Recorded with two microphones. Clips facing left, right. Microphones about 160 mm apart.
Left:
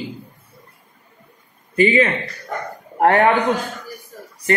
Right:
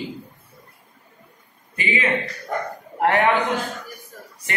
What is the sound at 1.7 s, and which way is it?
Speech, 40° left (ahead or behind).